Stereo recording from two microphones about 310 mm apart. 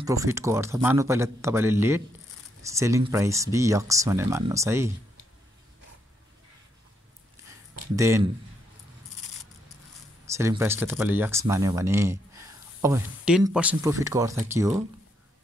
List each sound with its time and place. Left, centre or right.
0.0 s speech: centre
7.9 s speech: centre
10.2 s speech: centre